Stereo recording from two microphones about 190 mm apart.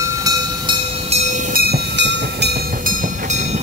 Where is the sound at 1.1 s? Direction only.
35° right (ahead or behind).